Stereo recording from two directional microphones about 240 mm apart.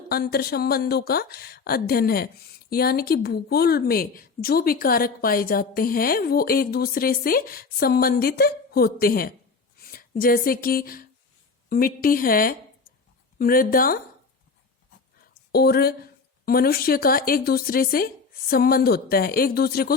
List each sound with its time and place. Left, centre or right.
0.1 s speech: left
15.5 s speech: left